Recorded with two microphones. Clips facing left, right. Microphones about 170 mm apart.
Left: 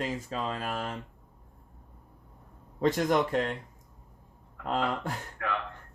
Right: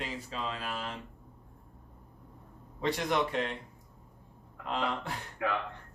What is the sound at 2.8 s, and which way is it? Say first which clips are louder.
Speech: left 5 dB; 45° left (ahead or behind).